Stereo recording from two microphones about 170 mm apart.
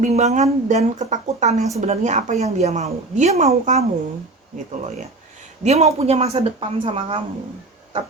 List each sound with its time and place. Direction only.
0.0 s a woman's voice: 40° right (ahead or behind)
5.6 s a woman's voice: 40° right (ahead or behind)